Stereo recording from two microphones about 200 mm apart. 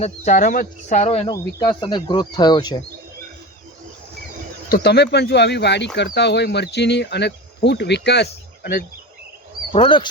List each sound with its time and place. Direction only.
0.0 s speech: 35° left (ahead or behind)
1.3 s speech: 20° left (ahead or behind)
4.7 s speech: 55° left (ahead or behind)
9.7 s speech: 25° left (ahead or behind)